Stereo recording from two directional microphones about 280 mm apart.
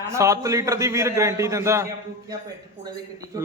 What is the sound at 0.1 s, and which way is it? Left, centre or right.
Speech, centre.